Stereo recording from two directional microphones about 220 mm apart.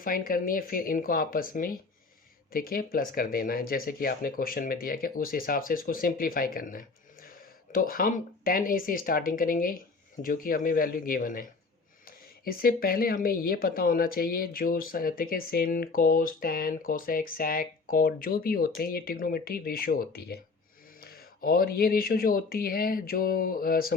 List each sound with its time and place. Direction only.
0.0 s speech: 40° left (ahead or behind)